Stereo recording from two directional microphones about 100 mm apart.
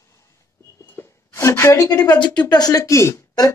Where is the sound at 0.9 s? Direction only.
25° left (ahead or behind).